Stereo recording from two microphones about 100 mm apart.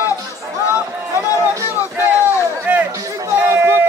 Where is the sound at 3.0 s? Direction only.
35° right (ahead or behind).